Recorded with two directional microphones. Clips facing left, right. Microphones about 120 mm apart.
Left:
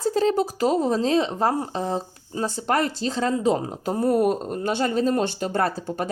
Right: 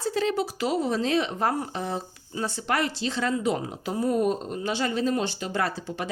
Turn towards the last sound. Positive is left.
turn(degrees=45)  # may be behind; listen again after turning